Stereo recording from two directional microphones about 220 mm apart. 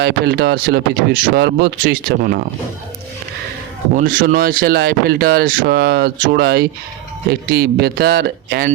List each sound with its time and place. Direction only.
0.0 s speech: 45° right (ahead or behind)
3.9 s speech: 40° right (ahead or behind)